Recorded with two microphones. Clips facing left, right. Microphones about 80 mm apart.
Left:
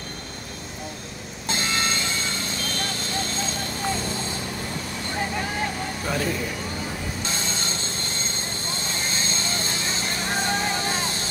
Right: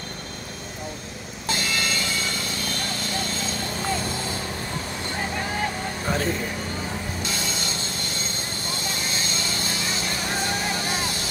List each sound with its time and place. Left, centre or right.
1.5 s music: left
7.2 s vehicle: left